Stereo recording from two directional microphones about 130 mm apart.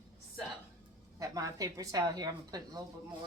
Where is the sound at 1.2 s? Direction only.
25° right (ahead or behind).